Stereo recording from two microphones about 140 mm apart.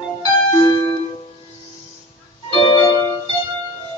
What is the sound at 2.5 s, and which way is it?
Music, 35° left (ahead or behind).